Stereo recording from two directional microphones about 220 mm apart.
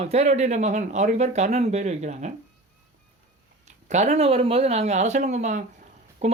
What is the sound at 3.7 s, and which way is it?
Speech, 30° right (ahead or behind).